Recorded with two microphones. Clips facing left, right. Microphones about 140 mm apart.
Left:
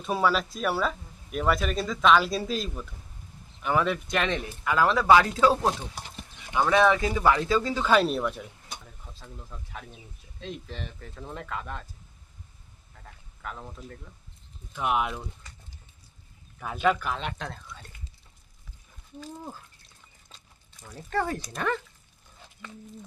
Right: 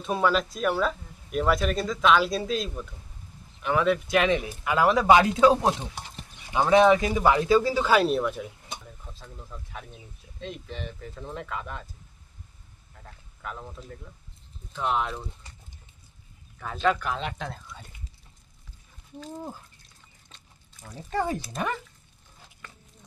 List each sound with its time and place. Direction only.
0.0 s speech: centre (ahead or behind)
4.6 s speech: 15° right (ahead or behind); by 8.4 s centre (ahead or behind)
9.5 s speech: centre (ahead or behind)
13.4 s speech: centre (ahead or behind)
14.7 s speech: 10° left (ahead or behind)
16.6 s speech: 10° left (ahead or behind)
21.1 s speech: 15° right (ahead or behind)